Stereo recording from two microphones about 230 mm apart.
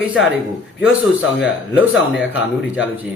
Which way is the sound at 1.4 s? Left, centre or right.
Left.